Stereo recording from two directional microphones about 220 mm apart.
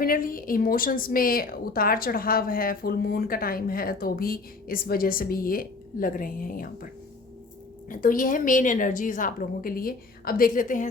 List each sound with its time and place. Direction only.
0.0 s speech: 40° left (ahead or behind)
7.9 s speech: 40° left (ahead or behind)